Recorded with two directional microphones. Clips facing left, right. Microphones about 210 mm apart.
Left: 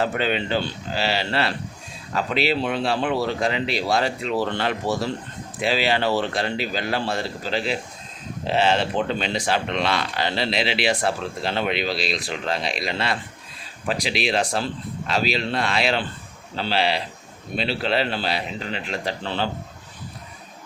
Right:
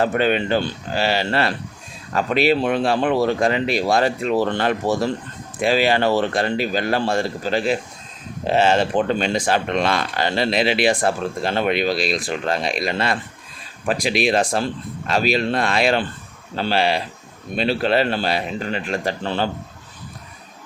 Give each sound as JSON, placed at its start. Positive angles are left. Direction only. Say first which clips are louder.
{"t": 0.0, "sound": "speech", "louder": "right 5 dB", "side_deg": -50}